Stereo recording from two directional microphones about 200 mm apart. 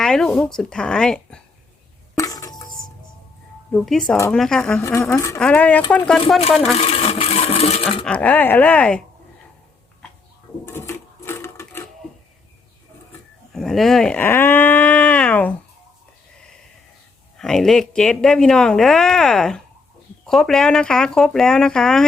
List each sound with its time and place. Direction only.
0.0 s speech: 5° left (ahead or behind)
2.1 s a sound: 15° left (ahead or behind)
3.7 s speech: centre (ahead or behind)
4.8 s speech: 15° left (ahead or behind)
6.7 s a sound: 30° left (ahead or behind)
7.9 s speech: 5° left (ahead or behind)
10.7 s sewing machine: 10° left (ahead or behind)
13.5 s speech: centre (ahead or behind)
17.3 s speech: centre (ahead or behind)